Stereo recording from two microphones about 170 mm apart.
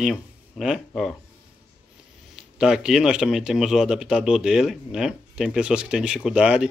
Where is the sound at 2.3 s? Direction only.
5° right (ahead or behind).